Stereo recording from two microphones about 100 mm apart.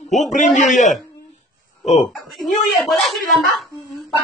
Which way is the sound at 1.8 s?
90° left.